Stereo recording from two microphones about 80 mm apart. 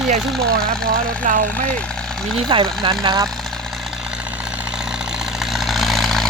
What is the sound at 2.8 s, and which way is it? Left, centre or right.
Speech, right.